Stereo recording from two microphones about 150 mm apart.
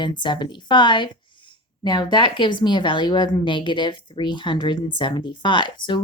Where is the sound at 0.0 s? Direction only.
30° left (ahead or behind).